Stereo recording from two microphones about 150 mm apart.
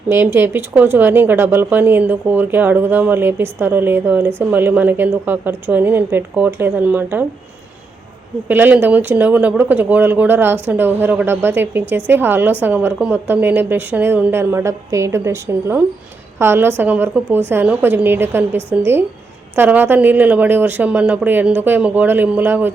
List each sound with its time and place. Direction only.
0.1 s speech: 15° right (ahead or behind)
8.4 s speech: 10° right (ahead or behind)